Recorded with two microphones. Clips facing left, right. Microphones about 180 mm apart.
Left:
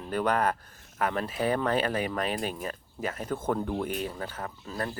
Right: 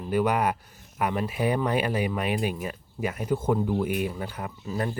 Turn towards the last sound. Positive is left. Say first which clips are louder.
# right 4 dB
turn(degrees=-15)  # may be behind; listen again after turning